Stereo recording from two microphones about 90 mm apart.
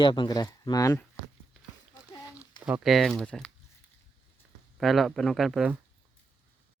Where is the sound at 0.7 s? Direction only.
40° left (ahead or behind).